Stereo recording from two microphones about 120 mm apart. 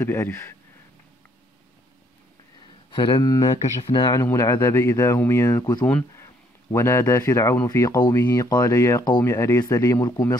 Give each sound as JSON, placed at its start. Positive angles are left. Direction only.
{"t": 0.0, "sound": "speech", "side_deg": 20}
{"t": 2.9, "sound": "a man's voice", "side_deg": 40}
{"t": 4.2, "sound": "speech", "side_deg": 25}
{"t": 5.6, "sound": "a man's voice", "side_deg": 35}
{"t": 6.1, "sound": "a man's voice", "side_deg": 25}